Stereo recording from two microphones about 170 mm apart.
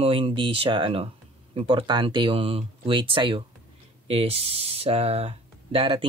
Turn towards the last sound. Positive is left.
turn(degrees=-35)  # may be behind; listen again after turning